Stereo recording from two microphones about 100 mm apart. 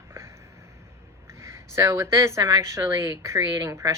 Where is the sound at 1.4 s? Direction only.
30° right (ahead or behind).